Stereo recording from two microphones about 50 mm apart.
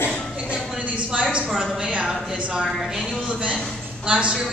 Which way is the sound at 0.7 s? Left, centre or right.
Right.